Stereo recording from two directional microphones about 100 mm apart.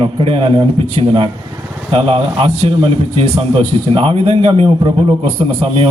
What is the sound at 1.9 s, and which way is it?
A man's voice, 65° right (ahead or behind).